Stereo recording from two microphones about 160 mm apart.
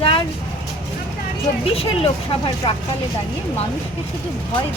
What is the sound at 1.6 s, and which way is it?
Speech, 35° left (ahead or behind).